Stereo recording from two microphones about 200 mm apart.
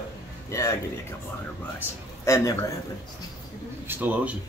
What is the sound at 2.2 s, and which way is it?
Speech, 15° left (ahead or behind).